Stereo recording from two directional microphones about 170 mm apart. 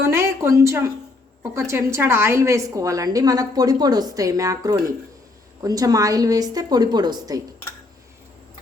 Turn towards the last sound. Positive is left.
turn(degrees=-20)  # may be behind; listen again after turning